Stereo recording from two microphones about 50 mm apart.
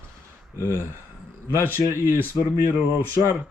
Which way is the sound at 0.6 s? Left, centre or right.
Left.